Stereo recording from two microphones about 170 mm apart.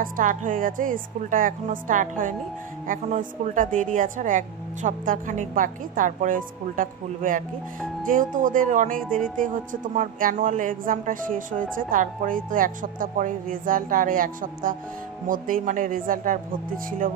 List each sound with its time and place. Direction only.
0.0 s speech: 50° right (ahead or behind)